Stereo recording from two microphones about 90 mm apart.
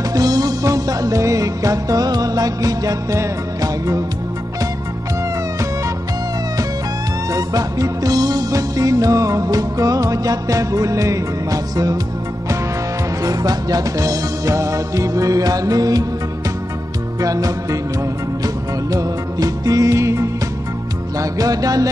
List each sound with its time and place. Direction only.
0.1 s music: 45° right (ahead or behind)
7.3 s music: 40° right (ahead or behind)
13.2 s music: 40° right (ahead or behind)
17.2 s music: 40° right (ahead or behind)